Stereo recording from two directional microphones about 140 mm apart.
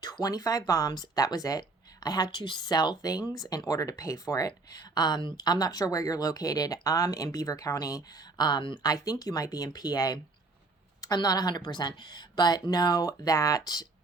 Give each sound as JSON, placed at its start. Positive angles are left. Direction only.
{"t": 0.0, "sound": "speech", "side_deg": 30}